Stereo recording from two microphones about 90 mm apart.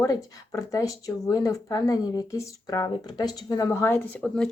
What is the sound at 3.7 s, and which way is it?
Speech, 25° left (ahead or behind).